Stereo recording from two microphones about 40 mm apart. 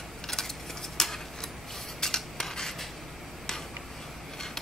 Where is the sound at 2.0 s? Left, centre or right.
Centre.